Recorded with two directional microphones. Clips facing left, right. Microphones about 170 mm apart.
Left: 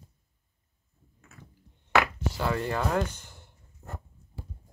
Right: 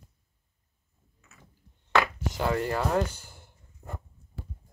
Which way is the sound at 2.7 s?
10° right (ahead or behind).